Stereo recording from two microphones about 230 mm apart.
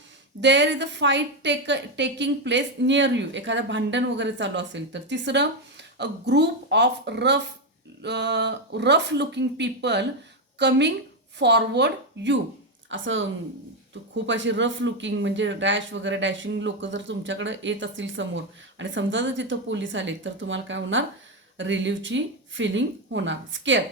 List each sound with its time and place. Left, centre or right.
0.4 s a woman's voice: right